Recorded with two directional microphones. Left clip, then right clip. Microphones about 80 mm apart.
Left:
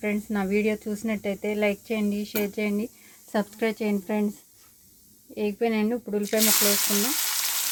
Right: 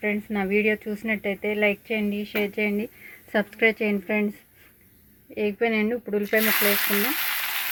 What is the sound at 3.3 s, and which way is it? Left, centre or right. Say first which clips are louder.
Speech: right 5 dB; centre.